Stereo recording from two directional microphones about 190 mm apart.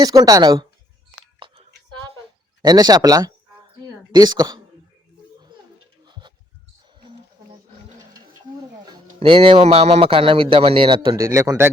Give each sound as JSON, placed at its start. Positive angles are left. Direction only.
{"t": 0.0, "sound": "a man's voice", "side_deg": -20}
{"t": 2.6, "sound": "a man's voice", "side_deg": -20}
{"t": 5.5, "sound": "a sound", "side_deg": -25}
{"t": 8.8, "sound": "a man's voice", "side_deg": -25}